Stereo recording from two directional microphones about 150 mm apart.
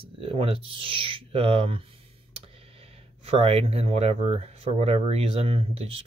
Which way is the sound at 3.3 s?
40° right (ahead or behind).